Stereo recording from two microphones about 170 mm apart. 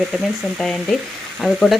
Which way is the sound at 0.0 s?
Centre (ahead or behind).